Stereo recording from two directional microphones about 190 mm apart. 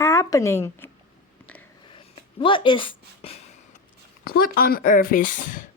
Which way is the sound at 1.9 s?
25° left (ahead or behind).